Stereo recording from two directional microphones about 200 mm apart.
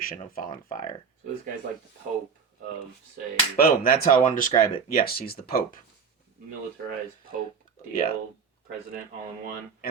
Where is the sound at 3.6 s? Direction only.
45° left (ahead or behind).